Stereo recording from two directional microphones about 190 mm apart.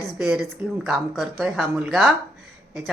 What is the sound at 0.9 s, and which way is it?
A woman's voice, centre (ahead or behind).